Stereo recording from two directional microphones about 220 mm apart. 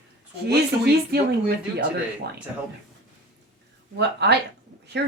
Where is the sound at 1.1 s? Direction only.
45° right (ahead or behind).